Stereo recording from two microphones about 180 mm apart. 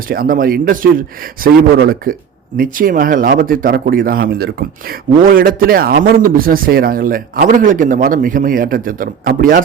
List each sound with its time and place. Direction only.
0.1 s speech: 55° right (ahead or behind)